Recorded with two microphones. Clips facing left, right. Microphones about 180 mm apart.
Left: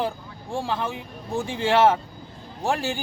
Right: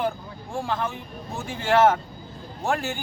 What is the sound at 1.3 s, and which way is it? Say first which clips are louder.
Speech: even; 30° left (ahead or behind).